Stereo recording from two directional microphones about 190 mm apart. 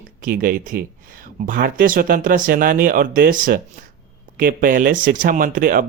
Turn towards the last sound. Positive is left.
turn(degrees=-45)  # may be behind; listen again after turning